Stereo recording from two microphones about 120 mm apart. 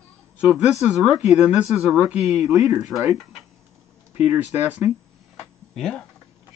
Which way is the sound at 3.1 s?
Centre (ahead or behind).